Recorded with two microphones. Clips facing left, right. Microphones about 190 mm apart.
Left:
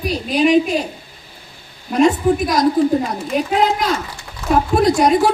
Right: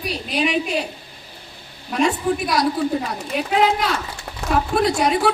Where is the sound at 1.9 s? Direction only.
40° left (ahead or behind).